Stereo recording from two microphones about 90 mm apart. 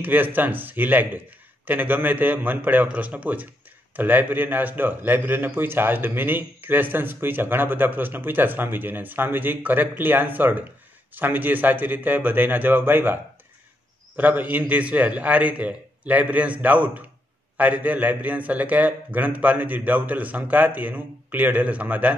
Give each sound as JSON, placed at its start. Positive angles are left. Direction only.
{"t": 0.0, "sound": "a man's voice", "side_deg": -20}